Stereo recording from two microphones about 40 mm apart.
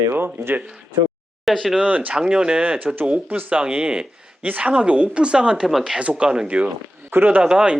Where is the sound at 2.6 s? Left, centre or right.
Right.